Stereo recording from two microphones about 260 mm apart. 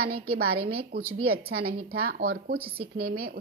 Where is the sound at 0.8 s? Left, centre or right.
Right.